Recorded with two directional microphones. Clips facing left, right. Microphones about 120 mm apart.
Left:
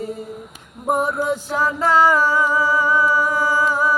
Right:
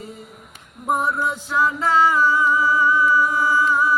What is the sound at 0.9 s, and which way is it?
Music, 45° left (ahead or behind).